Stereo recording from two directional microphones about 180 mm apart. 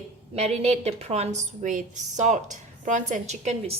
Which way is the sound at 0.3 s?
35° right (ahead or behind).